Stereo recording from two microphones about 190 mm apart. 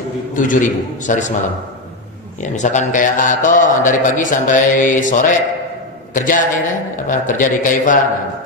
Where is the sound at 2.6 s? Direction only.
40° left (ahead or behind).